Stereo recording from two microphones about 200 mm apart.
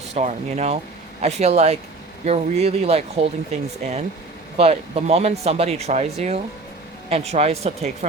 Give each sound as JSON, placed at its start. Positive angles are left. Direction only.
{"t": 0.1, "sound": "speech", "side_deg": -35}